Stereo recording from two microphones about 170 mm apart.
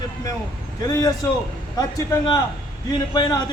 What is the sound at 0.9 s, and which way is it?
Speech, 20° left (ahead or behind).